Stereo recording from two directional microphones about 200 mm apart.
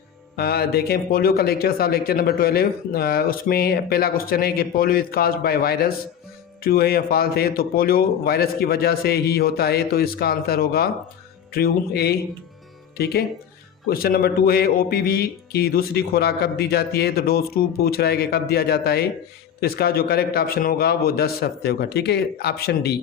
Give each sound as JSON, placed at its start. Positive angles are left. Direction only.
{"t": 0.3, "sound": "speech", "side_deg": 50}
{"t": 13.9, "sound": "speech", "side_deg": 50}